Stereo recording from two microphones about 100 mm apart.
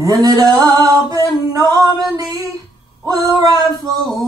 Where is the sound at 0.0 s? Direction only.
35° right (ahead or behind).